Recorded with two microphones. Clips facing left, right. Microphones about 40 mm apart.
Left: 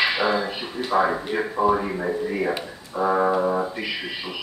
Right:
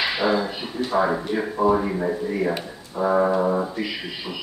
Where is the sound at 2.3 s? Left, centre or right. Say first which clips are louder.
Right 1 dB; centre.